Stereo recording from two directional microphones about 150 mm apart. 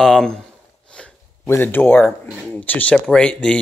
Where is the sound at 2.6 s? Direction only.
10° left (ahead or behind).